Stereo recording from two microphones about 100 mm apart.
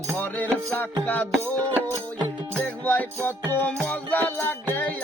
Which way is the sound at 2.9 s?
20° left (ahead or behind).